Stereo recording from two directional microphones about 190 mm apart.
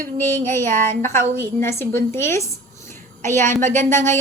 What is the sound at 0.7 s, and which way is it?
Speech, 40° right (ahead or behind).